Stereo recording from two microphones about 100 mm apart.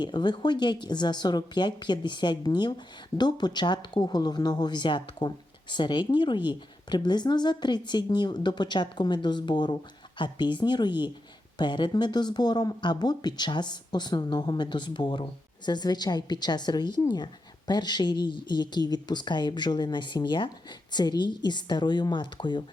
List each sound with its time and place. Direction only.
0.0 s a woman's voice: 50° left (ahead or behind)